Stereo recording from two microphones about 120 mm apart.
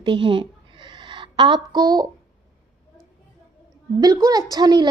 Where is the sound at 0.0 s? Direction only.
40° right (ahead or behind).